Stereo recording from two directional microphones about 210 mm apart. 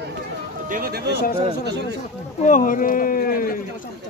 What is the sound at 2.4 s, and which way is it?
Speech, 40° left (ahead or behind).